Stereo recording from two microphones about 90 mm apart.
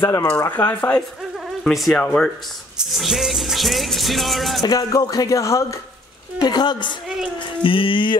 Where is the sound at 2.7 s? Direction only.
Centre (ahead or behind).